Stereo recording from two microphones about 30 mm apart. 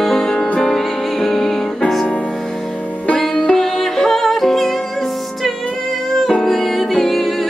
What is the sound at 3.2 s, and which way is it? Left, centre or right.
Music, left.